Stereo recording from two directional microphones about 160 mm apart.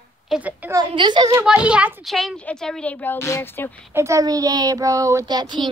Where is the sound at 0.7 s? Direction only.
30° right (ahead or behind).